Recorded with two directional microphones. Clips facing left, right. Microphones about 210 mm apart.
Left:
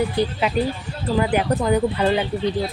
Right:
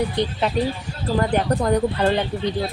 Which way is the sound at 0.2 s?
5° left (ahead or behind).